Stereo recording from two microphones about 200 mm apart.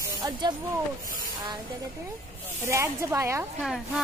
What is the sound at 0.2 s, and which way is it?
Speech, 20° right (ahead or behind).